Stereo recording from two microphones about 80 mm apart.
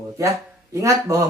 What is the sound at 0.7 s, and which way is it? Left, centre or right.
Speech, right.